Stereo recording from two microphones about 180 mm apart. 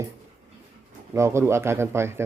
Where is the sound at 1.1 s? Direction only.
15° right (ahead or behind).